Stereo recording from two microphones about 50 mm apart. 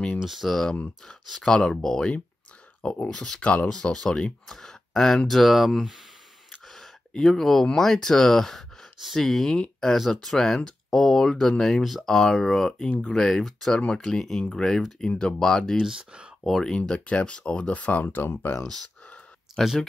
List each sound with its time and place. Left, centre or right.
0.2 s speech: centre
2.8 s speech: left
3.1 s speech: centre
15.0 s speech: centre
15.8 s speech: centre
16.4 s speech: centre
16.7 s speech: left
18.6 s speech: centre